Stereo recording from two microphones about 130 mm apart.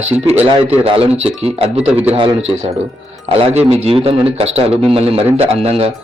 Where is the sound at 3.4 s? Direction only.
50° right (ahead or behind).